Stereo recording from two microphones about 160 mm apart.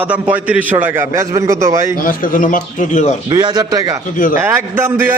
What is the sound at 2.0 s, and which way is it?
Speech, 60° left (ahead or behind).